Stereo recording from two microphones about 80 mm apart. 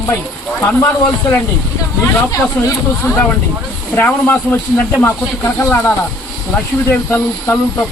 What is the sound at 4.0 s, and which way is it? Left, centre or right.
Speech, left.